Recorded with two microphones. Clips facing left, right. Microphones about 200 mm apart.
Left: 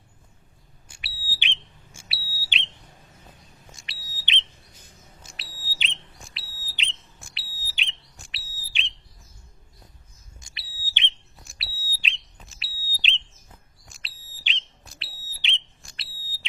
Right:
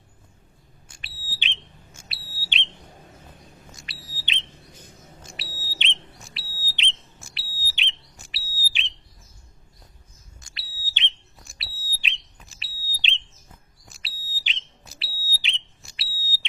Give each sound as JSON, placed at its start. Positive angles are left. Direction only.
{"t": 0.9, "sound": "smoke detector", "side_deg": 10}
{"t": 5.2, "sound": "smoke detector", "side_deg": 0}
{"t": 8.1, "sound": "whistle", "side_deg": 0}
{"t": 10.4, "sound": "bird", "side_deg": 20}
{"t": 11.4, "sound": "smoke detector", "side_deg": 0}